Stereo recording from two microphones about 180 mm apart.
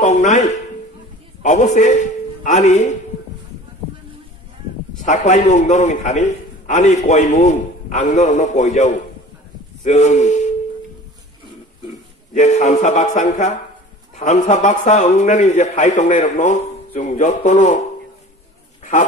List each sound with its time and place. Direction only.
0.0 s a sound: 45° left (ahead or behind)
1.4 s a man's voice: 40° left (ahead or behind)
5.0 s a man's voice: 40° left (ahead or behind)
12.4 s a man's voice: 40° left (ahead or behind)